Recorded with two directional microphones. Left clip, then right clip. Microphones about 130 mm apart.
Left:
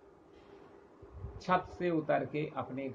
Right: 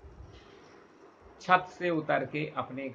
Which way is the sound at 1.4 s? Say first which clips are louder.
Right 6 dB; 15° right (ahead or behind).